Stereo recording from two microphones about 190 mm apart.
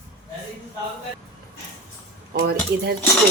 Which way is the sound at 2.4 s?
55° right (ahead or behind).